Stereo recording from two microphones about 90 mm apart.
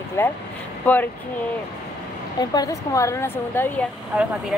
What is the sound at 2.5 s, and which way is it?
A woman's voice, 40° left (ahead or behind).